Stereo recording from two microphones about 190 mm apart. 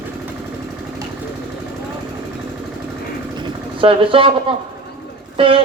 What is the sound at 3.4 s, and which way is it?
Speech, 25° right (ahead or behind).